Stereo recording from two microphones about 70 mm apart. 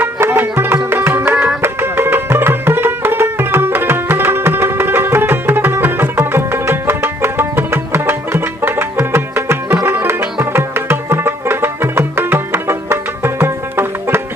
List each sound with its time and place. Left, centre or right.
0.0 s music: right